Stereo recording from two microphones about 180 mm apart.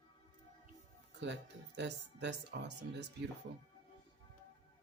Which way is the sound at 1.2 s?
75° right (ahead or behind).